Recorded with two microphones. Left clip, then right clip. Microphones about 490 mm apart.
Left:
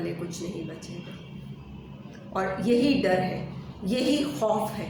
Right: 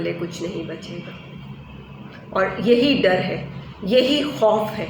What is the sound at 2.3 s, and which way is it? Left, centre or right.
A woman's voice, left.